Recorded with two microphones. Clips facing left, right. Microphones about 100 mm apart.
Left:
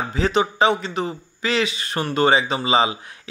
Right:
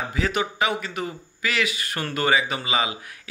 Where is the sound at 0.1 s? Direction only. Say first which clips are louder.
Left 7 dB; 30° left (ahead or behind).